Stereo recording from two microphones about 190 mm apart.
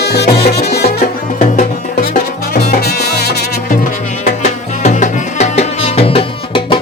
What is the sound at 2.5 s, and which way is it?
Music, 50° left (ahead or behind).